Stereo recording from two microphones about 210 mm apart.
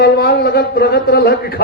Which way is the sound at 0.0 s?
45° left (ahead or behind).